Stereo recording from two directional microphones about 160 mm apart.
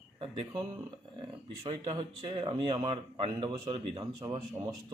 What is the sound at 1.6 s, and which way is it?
Speech, 30° right (ahead or behind).